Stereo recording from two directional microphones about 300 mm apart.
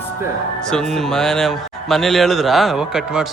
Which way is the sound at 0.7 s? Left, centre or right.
Centre.